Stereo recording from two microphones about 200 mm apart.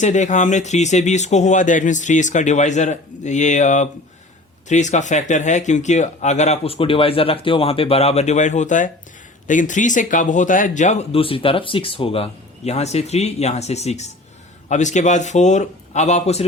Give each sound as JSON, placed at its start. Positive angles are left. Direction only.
{"t": 0.0, "sound": "speech", "side_deg": 35}